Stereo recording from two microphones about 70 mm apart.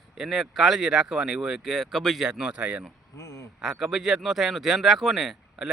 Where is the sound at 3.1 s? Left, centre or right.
Left.